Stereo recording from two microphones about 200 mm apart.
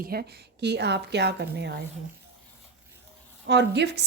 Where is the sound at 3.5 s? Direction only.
60° right (ahead or behind).